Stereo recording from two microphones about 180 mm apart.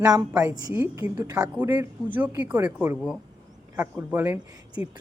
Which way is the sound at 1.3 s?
5° right (ahead or behind).